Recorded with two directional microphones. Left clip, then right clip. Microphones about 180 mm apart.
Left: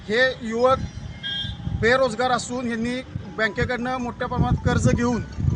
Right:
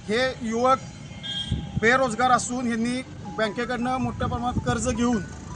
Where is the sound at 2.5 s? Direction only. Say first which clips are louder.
Left 1 dB; 40° left (ahead or behind).